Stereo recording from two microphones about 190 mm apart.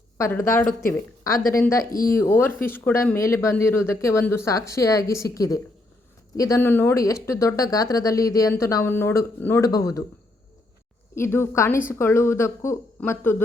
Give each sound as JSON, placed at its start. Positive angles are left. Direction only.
{"t": 0.2, "sound": "speech", "side_deg": 15}
{"t": 1.8, "sound": "speech", "side_deg": 50}
{"t": 2.0, "sound": "speech", "side_deg": 15}
{"t": 11.1, "sound": "speech", "side_deg": 15}